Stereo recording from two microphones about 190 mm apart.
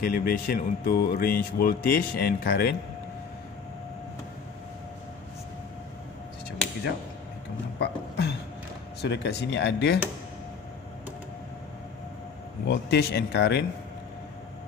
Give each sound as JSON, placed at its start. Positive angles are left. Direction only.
{"t": 0.0, "sound": "speech", "side_deg": 50}
{"t": 7.8, "sound": "a sound", "side_deg": 60}
{"t": 9.0, "sound": "speech", "side_deg": 65}
{"t": 12.6, "sound": "speech", "side_deg": 60}